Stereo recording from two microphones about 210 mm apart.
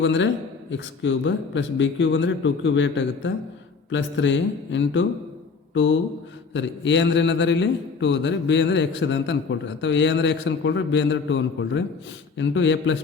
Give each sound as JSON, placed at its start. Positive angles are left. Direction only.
{"t": 0.0, "sound": "a man's voice", "side_deg": 60}
{"t": 6.5, "sound": "a man's voice", "side_deg": 60}